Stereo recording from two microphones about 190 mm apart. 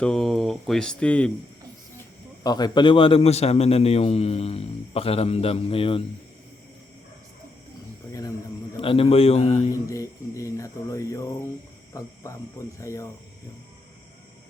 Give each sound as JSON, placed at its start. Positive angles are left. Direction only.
{"t": 0.0, "sound": "speech", "side_deg": 0}
{"t": 2.4, "sound": "a man's voice", "side_deg": 20}
{"t": 8.7, "sound": "a man's voice", "side_deg": 30}
{"t": 9.7, "sound": "a sound", "side_deg": 15}
{"t": 11.9, "sound": "speech", "side_deg": 15}